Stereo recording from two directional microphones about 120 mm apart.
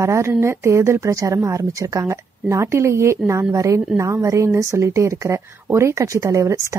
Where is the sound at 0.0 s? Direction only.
25° right (ahead or behind).